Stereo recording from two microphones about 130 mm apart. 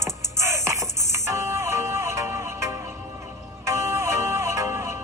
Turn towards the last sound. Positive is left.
turn(degrees=-20)  # may be behind; listen again after turning